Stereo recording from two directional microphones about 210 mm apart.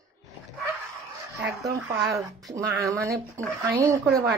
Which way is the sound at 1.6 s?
15° right (ahead or behind).